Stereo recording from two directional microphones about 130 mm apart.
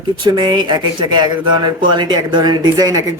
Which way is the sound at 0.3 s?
35° right (ahead or behind).